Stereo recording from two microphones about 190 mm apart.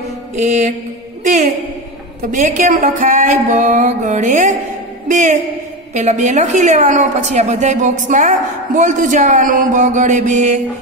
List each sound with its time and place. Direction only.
2.3 s a woman's voice: 40° right (ahead or behind)